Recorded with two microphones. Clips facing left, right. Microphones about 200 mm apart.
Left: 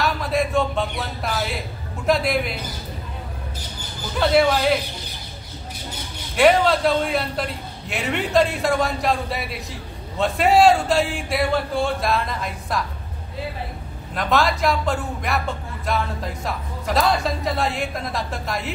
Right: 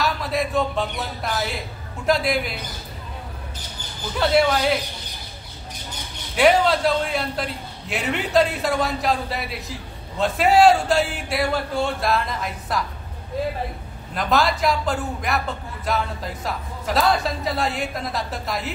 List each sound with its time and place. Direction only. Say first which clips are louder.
0.0 s a sound: left 2 dB; centre (ahead or behind)
2.0 s a man's voice: left 1 dB; centre (ahead or behind)
4.2 s a man's voice: left 1 dB; centre (ahead or behind)
6.3 s a man's voice: left 1 dB; centre (ahead or behind)
14.1 s a man's voice: even; centre (ahead or behind)